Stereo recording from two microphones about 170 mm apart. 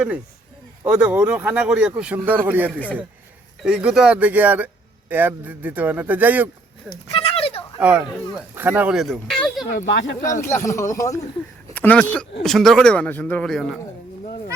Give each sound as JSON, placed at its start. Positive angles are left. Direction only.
{"t": 0.9, "sound": "speech", "side_deg": -10}
{"t": 2.7, "sound": "speech", "side_deg": 10}
{"t": 3.6, "sound": "speech", "side_deg": -5}
{"t": 7.1, "sound": "a sound", "side_deg": 35}
{"t": 7.8, "sound": "speech", "side_deg": -10}
{"t": 9.8, "sound": "speech", "side_deg": 90}
{"t": 10.4, "sound": "speech", "side_deg": 15}
{"t": 11.7, "sound": "speech", "side_deg": 10}